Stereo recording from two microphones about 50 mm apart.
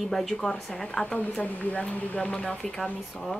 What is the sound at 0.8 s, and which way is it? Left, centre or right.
Speech, centre.